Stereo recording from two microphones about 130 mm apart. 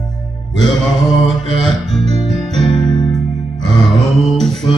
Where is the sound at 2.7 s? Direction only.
40° left (ahead or behind).